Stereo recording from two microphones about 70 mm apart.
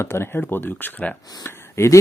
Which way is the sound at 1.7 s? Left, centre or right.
Left.